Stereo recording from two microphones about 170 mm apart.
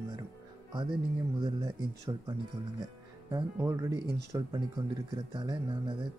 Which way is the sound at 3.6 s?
15° right (ahead or behind).